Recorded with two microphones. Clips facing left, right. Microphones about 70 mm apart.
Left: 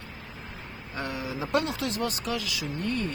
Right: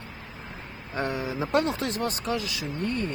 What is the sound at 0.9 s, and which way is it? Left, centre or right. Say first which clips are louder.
Speech: right 4 dB; right.